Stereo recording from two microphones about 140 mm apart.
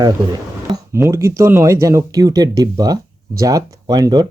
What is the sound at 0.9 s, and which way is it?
Speech, 20° right (ahead or behind).